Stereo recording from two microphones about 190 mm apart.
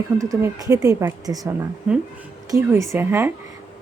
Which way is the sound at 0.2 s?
15° right (ahead or behind).